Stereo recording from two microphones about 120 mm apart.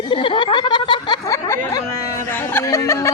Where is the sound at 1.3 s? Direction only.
25° left (ahead or behind).